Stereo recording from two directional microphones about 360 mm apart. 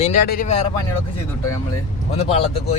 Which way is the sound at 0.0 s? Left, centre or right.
Left.